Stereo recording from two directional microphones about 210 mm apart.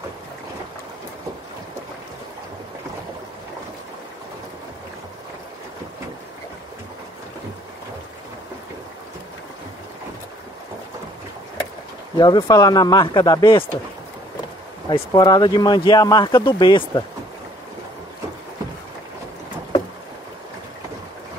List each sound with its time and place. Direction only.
12.2 s speech: 20° left (ahead or behind)
14.9 s speech: 20° left (ahead or behind)